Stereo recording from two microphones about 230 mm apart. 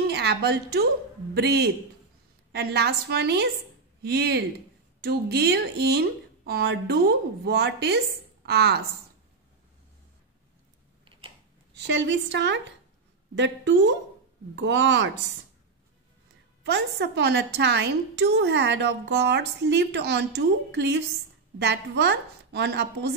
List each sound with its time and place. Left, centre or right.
0.1 s a woman's voice: right
11.8 s a woman's voice: right
16.6 s a woman's voice: right